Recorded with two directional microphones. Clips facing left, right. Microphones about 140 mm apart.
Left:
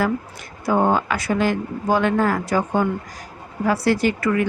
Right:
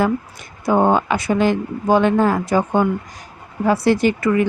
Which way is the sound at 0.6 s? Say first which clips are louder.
Right 3 dB; 20° right (ahead or behind).